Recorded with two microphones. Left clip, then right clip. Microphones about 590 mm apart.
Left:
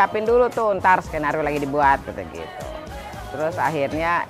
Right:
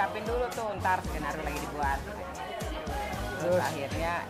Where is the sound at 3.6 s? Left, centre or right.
Left.